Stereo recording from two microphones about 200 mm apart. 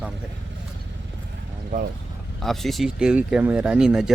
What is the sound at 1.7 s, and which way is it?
Speech, 40° right (ahead or behind).